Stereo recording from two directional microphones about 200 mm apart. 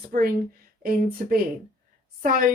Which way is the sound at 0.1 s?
45° right (ahead or behind).